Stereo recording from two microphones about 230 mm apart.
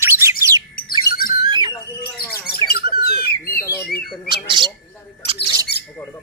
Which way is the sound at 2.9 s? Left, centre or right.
Left.